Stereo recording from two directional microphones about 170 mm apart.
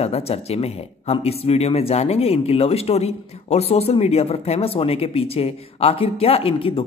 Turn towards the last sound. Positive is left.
turn(degrees=35)  # may be behind; listen again after turning